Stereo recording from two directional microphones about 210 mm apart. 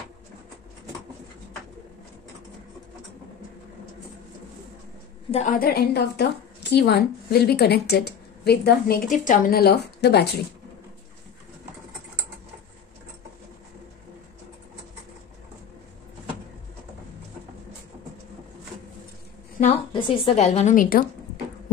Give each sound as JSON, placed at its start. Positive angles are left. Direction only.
{"t": 5.3, "sound": "a woman's voice", "side_deg": 35}
{"t": 19.6, "sound": "a woman's voice", "side_deg": 25}